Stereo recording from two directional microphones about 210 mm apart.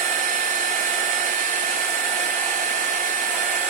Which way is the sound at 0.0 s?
35° right (ahead or behind).